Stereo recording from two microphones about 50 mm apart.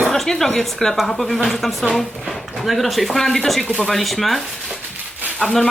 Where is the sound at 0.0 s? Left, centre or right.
Centre.